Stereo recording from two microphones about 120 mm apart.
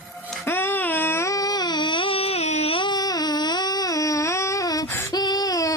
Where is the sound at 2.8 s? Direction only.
35° left (ahead or behind).